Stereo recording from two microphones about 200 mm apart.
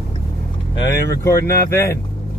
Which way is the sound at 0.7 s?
15° left (ahead or behind).